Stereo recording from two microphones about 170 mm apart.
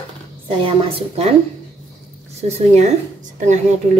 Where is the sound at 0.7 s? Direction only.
35° right (ahead or behind).